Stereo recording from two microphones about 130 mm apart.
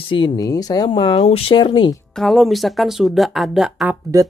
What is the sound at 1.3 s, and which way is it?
Speech, 50° left (ahead or behind).